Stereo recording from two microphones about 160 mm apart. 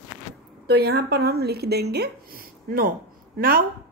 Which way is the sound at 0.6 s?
90° right.